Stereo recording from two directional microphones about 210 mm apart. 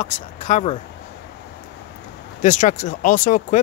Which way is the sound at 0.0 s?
35° left (ahead or behind).